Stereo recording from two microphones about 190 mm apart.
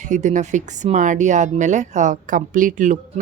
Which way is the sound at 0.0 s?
40° right (ahead or behind).